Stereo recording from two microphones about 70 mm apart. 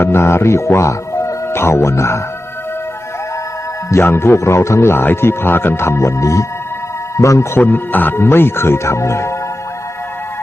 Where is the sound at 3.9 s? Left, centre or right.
Left.